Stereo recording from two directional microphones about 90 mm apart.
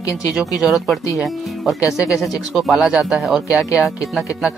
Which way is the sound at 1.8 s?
35° left (ahead or behind).